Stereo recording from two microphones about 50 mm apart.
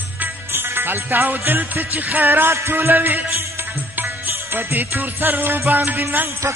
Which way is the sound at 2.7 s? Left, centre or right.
Right.